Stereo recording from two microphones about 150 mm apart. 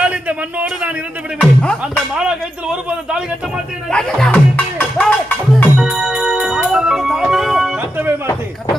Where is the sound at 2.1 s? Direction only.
5° right (ahead or behind).